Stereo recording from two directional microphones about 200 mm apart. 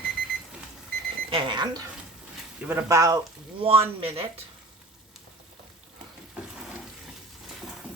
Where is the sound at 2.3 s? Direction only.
10° right (ahead or behind).